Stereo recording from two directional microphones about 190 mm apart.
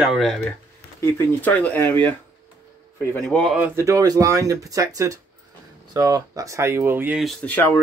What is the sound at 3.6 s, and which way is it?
Speech, 15° right (ahead or behind).